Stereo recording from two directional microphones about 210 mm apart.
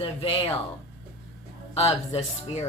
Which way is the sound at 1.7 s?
30° left (ahead or behind).